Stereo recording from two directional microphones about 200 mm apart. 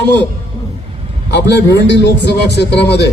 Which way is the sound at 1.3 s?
60° left (ahead or behind).